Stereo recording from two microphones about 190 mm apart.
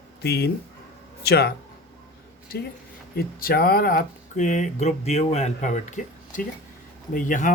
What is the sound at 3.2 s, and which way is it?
Speech, 50° left (ahead or behind).